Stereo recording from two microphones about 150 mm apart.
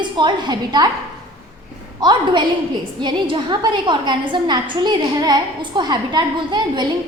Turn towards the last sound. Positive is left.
turn(degrees=-30)  # may be behind; listen again after turning